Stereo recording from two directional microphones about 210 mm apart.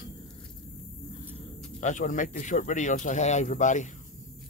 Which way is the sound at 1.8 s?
35° left (ahead or behind).